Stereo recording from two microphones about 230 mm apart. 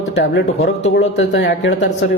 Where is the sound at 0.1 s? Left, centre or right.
Left.